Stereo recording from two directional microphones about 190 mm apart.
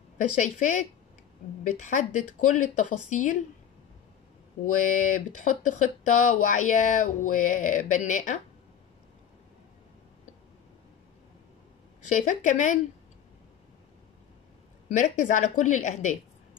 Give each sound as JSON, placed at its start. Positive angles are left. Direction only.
{"t": 0.4, "sound": "speech", "side_deg": 40}
{"t": 4.8, "sound": "speech", "side_deg": 40}
{"t": 12.1, "sound": "speech", "side_deg": 40}
{"t": 14.9, "sound": "speech", "side_deg": 40}